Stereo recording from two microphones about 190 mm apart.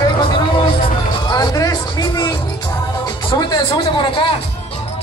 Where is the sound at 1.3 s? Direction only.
20° left (ahead or behind).